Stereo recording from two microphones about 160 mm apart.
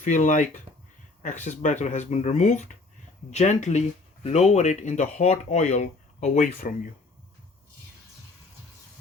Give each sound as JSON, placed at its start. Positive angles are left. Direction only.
{"t": 0.0, "sound": "speech", "side_deg": 50}